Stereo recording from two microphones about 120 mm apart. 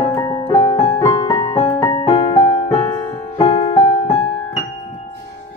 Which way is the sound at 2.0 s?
45° left (ahead or behind).